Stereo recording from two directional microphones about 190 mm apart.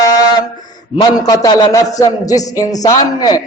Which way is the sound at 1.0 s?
20° left (ahead or behind).